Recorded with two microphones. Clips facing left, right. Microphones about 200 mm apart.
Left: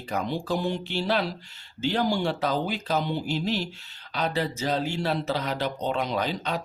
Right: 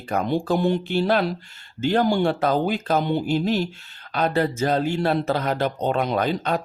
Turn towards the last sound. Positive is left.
turn(degrees=-55)  # may be behind; listen again after turning